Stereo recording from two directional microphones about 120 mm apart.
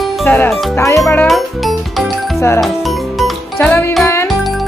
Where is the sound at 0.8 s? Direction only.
25° left (ahead or behind).